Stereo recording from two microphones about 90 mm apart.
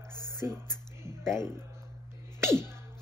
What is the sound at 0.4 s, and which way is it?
Speech, 30° right (ahead or behind).